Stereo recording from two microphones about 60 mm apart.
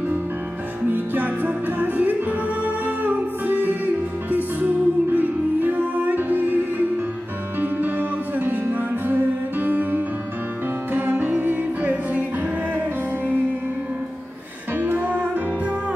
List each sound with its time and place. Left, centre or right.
0.9 s music: right
7.6 s music: right
14.8 s music: right